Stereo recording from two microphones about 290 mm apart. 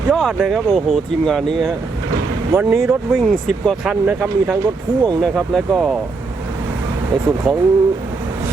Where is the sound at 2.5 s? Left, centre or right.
Centre.